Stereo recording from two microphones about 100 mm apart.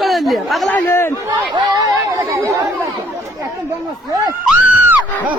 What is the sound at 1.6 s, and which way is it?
Speech, 40° right (ahead or behind).